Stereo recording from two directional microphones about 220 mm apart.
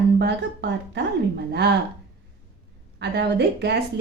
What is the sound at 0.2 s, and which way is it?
Speech, 50° right (ahead or behind).